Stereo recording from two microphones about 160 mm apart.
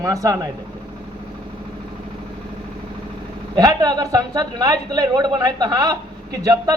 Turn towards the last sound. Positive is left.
turn(degrees=-25)  # may be behind; listen again after turning